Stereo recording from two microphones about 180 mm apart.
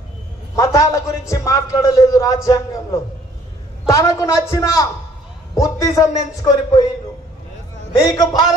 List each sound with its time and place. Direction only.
0.6 s a man's voice: 15° left (ahead or behind)
7.9 s a man's voice: 20° left (ahead or behind)